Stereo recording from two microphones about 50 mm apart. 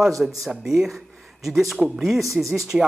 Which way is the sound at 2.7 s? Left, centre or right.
Centre.